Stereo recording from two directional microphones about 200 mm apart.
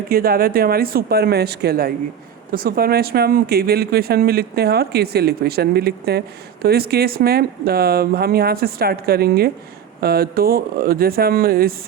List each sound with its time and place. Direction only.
0.1 s speech: 50° right (ahead or behind)